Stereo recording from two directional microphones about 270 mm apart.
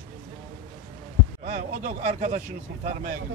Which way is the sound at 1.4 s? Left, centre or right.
Right.